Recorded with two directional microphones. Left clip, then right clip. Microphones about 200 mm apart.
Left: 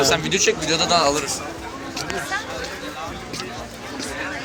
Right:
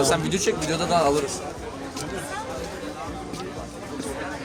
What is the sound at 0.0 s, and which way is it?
Speech, 50° right (ahead or behind).